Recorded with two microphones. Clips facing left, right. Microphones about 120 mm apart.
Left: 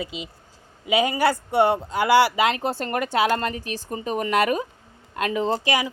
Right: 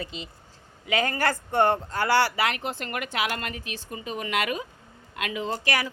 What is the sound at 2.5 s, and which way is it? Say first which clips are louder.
Speech: left 6 dB; 30° left (ahead or behind).